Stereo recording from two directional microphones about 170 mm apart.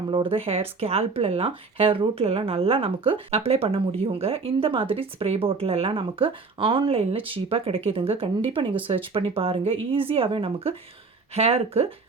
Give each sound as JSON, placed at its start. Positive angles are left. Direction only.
{"t": 0.1, "sound": "speech", "side_deg": -30}